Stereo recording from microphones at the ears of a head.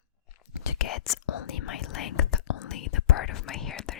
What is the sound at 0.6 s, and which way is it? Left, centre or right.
Whispering, left.